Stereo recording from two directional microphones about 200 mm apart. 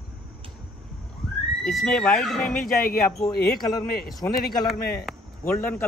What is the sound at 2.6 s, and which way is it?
Speech, 45° left (ahead or behind).